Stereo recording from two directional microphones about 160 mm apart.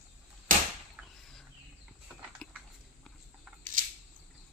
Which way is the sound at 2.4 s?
5° left (ahead or behind).